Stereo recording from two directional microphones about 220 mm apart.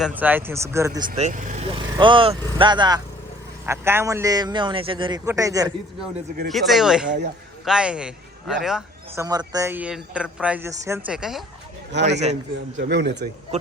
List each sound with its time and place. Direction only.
0.0 s speech: 5° right (ahead or behind)
1.2 s speech: 35° right (ahead or behind)
1.8 s speech: 20° right (ahead or behind)
6.5 s a man's voice: centre (ahead or behind)
9.2 s speech: 15° right (ahead or behind); by 11.4 s centre (ahead or behind)
12.0 s a man's voice: 30° right (ahead or behind)
12.7 s speech: 50° right (ahead or behind)